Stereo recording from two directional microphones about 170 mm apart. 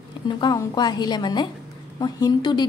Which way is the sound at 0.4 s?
25° left (ahead or behind).